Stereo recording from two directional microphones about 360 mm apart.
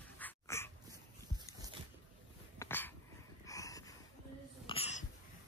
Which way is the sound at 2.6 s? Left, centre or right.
Centre.